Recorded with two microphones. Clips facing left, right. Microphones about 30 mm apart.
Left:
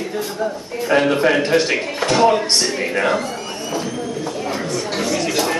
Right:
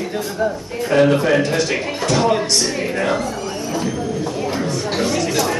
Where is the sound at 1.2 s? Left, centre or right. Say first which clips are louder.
Left 1 dB; left.